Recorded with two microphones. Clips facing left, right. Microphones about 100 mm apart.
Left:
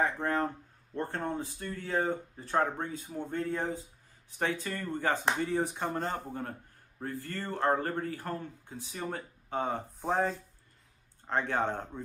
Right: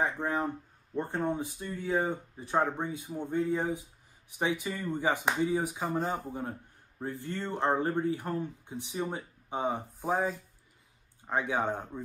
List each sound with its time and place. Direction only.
0.0 s speech: 15° right (ahead or behind)
7.0 s speech: 20° right (ahead or behind)